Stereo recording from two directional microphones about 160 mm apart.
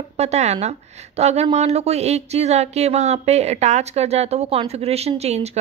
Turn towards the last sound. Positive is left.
turn(degrees=-40)  # may be behind; listen again after turning